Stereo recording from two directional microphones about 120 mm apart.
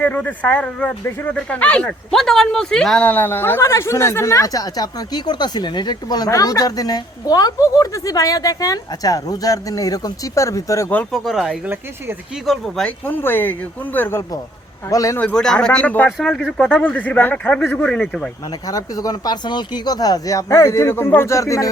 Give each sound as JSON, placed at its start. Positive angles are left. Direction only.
{"t": 0.0, "sound": "speech", "side_deg": 15}
{"t": 11.1, "sound": "speech", "side_deg": 0}
{"t": 11.6, "sound": "speech", "side_deg": -15}
{"t": 12.5, "sound": "speech", "side_deg": 5}
{"t": 13.1, "sound": "speech", "side_deg": 15}
{"t": 15.2, "sound": "speech", "side_deg": 10}
{"t": 18.7, "sound": "speech", "side_deg": 30}